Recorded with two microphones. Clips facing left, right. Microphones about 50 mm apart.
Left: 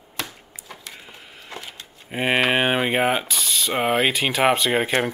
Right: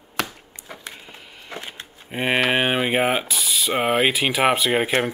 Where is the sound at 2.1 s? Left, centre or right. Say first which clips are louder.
Even; centre.